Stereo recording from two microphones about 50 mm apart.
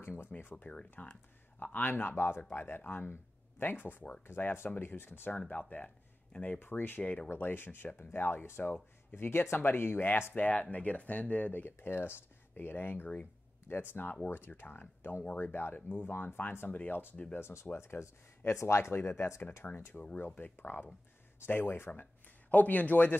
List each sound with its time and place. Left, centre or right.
0.0 s speech: left
0.6 s speech: left
1.6 s speech: left
2.1 s speech: left
5.5 s speech: left
7.0 s speech: left
7.2 s speech: left
10.3 s speech: left
17.4 s speech: left
18.9 s speech: left
22.5 s speech: left